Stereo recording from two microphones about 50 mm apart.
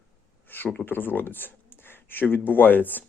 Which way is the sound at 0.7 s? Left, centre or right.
Left.